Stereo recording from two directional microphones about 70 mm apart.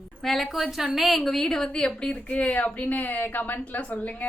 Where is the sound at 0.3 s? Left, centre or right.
Centre.